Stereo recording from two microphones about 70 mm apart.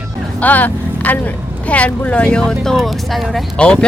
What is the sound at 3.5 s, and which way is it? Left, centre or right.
Speech, centre.